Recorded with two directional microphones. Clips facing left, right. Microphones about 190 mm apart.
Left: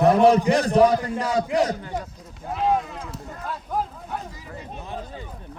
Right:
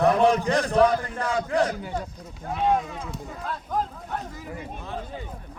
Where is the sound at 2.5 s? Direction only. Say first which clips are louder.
Left 1 dB; centre (ahead or behind).